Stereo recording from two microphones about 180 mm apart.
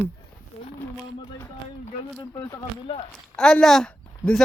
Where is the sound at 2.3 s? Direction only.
20° left (ahead or behind).